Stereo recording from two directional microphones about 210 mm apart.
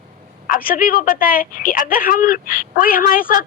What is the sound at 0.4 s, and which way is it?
Speech, 40° left (ahead or behind).